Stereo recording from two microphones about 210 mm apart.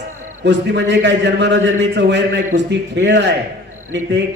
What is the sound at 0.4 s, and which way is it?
A man's voice, 55° right (ahead or behind).